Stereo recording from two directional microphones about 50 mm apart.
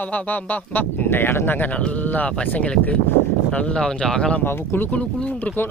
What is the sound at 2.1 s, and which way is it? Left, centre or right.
Speech, left.